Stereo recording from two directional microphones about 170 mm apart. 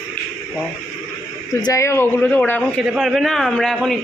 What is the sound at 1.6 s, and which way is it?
A man's voice, 15° left (ahead or behind).